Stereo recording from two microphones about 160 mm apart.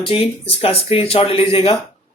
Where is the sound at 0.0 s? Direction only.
35° left (ahead or behind).